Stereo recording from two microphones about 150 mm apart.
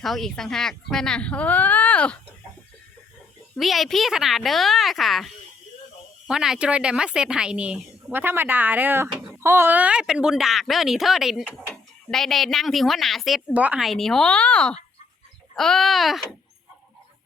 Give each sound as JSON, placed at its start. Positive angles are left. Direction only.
{"t": 0.0, "sound": "a woman's voice", "side_deg": 0}
{"t": 3.5, "sound": "a woman's voice", "side_deg": 0}
{"t": 13.5, "sound": "a woman's voice", "side_deg": -10}